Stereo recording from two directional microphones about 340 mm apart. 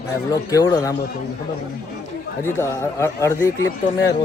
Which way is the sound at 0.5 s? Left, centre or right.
Centre.